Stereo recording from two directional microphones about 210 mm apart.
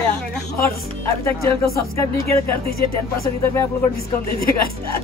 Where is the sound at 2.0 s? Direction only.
15° left (ahead or behind).